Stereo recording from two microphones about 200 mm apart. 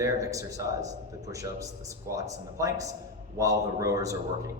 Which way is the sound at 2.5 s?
15° right (ahead or behind).